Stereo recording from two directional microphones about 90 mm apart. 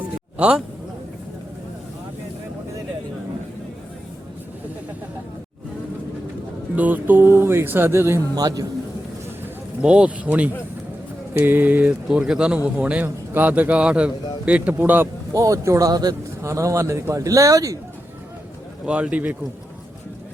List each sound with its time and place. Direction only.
0.3 s a man's voice: 15° right (ahead or behind)
6.7 s speech: 20° right (ahead or behind)
8.4 s a man's voice: 45° right (ahead or behind)
9.8 s a man's voice: 10° right (ahead or behind)
12.0 s a man's voice: 5° right (ahead or behind); by 15.0 s 20° right (ahead or behind)
15.3 s a man's voice: 35° right (ahead or behind)
16.4 s a man's voice: 35° right (ahead or behind)
18.9 s a man's voice: 15° right (ahead or behind)